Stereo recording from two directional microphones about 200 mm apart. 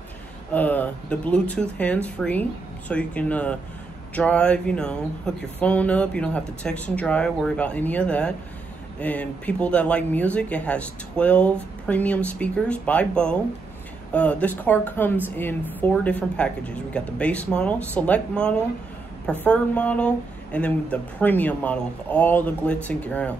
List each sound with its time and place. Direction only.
0.5 s speech: 10° left (ahead or behind)